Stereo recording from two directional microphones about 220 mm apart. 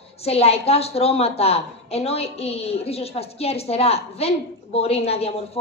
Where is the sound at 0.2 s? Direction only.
30° left (ahead or behind).